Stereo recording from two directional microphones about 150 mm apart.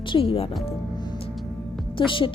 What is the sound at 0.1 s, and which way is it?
Speech, 40° left (ahead or behind).